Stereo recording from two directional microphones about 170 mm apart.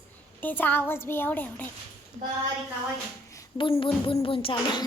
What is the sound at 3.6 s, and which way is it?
Speech, 30° left (ahead or behind).